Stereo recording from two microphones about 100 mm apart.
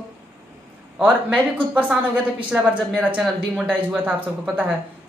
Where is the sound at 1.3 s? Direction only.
15° right (ahead or behind).